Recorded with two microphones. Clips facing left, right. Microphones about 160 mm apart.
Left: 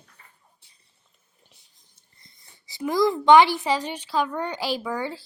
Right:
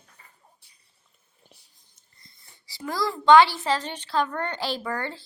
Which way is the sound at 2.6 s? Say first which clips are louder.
Left 7 dB; 20° left (ahead or behind).